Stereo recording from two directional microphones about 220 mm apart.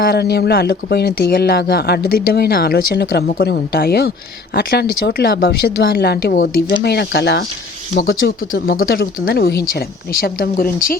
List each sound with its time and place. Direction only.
0.0 s speech: 45° left (ahead or behind)